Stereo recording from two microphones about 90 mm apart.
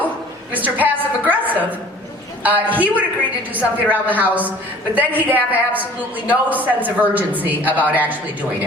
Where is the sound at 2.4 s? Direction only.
20° right (ahead or behind).